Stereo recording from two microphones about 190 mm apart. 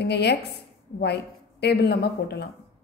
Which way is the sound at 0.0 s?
60° left (ahead or behind).